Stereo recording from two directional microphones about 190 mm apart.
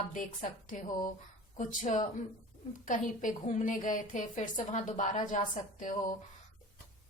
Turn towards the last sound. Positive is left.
turn(degrees=40)  # may be behind; listen again after turning